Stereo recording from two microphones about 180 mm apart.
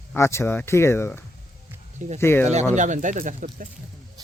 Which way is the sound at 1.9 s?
40° right (ahead or behind).